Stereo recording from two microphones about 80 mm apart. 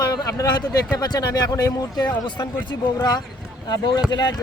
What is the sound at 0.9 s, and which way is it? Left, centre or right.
Speech, left.